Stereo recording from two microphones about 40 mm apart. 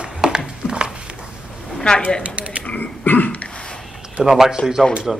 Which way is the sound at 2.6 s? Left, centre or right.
Left.